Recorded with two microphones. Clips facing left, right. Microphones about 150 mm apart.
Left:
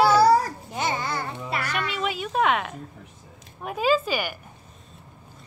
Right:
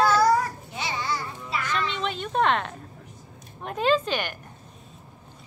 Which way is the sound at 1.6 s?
10° left (ahead or behind).